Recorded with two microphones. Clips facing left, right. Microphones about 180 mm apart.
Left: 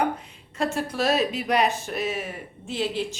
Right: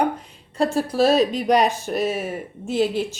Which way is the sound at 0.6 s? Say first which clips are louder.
Right 6 dB; 35° right (ahead or behind).